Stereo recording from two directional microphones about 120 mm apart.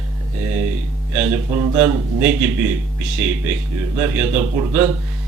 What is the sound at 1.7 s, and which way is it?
Speech, 15° right (ahead or behind).